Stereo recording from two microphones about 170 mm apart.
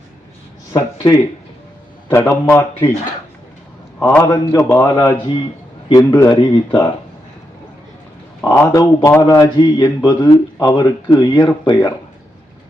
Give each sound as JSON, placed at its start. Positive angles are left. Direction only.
{"t": 0.7, "sound": "a man's voice", "side_deg": 20}
{"t": 4.1, "sound": "a man's voice", "side_deg": 15}
{"t": 8.4, "sound": "speech", "side_deg": 20}